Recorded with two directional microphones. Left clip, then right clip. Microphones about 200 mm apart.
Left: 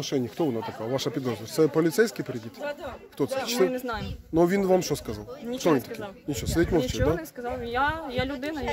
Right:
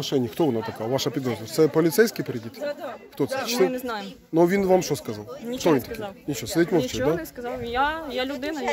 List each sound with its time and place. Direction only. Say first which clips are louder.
0.0 s speech: right 4 dB; 20° right (ahead or behind)
0.9 s speech: right 3 dB; 5° right (ahead or behind)
3.2 s speech: right 2 dB; centre (ahead or behind)